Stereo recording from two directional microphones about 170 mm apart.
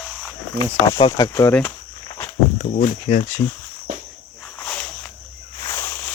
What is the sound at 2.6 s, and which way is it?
Speech, 50° left (ahead or behind).